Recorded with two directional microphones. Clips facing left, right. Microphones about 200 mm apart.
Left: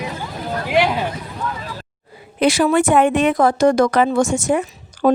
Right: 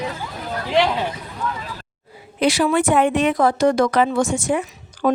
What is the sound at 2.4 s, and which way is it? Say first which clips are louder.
Speech: left 2 dB; 50° left (ahead or behind).